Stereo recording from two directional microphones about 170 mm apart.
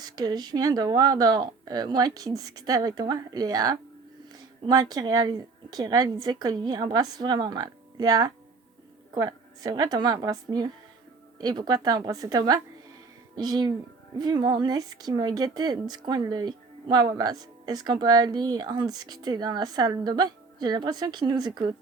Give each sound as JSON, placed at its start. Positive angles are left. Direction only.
{"t": 0.0, "sound": "speech", "side_deg": -25}